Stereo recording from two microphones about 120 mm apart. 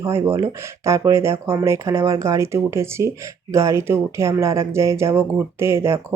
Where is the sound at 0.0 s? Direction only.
25° right (ahead or behind).